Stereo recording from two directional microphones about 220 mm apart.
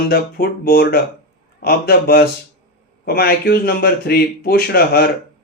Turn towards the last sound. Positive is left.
turn(degrees=45)  # may be behind; listen again after turning